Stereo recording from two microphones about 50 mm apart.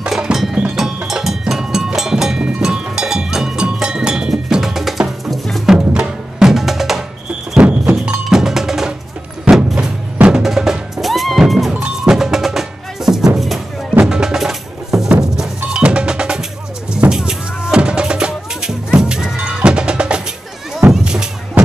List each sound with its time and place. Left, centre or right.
0.1 s music: centre
5.7 s music: centre
7.5 s music: right
8.3 s cowbell: centre
9.4 s vehicle: centre
10.4 s music: centre
15.8 s percussion: right
16.9 s music: centre
19.3 s percussion: centre
21.0 s music: centre